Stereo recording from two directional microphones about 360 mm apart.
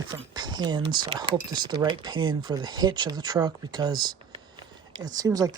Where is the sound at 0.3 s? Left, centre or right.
Centre.